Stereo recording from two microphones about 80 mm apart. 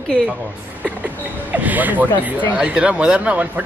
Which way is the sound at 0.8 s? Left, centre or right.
Centre.